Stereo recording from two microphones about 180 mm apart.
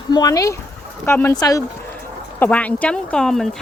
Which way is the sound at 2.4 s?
10° left (ahead or behind).